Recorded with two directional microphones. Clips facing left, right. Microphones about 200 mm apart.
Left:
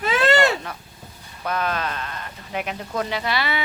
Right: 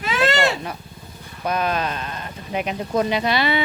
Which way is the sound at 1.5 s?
15° right (ahead or behind).